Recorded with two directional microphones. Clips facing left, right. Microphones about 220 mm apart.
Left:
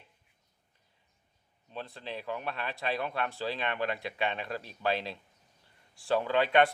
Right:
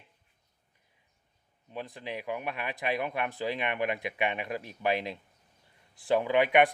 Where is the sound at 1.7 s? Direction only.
15° right (ahead or behind).